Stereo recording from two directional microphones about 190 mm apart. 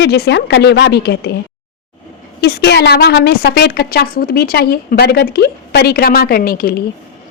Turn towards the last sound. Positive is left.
turn(degrees=50)  # may be behind; listen again after turning